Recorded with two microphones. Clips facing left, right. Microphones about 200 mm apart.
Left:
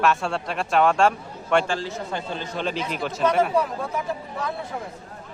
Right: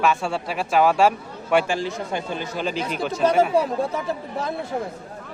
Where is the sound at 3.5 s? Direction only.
30° right (ahead or behind).